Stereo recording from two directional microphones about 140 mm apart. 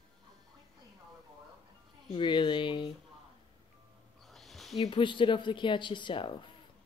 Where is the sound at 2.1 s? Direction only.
35° left (ahead or behind).